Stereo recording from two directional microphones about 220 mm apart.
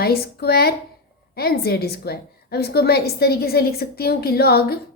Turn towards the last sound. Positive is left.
turn(degrees=45)  # may be behind; listen again after turning